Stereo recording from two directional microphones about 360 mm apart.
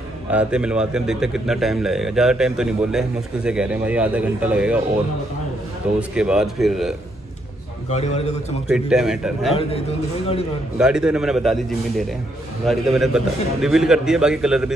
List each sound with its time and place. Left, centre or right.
0.3 s speech: centre
5.9 s speech: centre
7.9 s a man's voice: centre
8.6 s speech: centre
9.6 s a man's voice: centre
10.8 s speech: centre
12.6 s speech: centre